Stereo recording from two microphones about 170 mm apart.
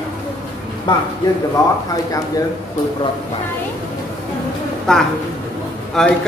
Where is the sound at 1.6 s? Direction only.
20° left (ahead or behind).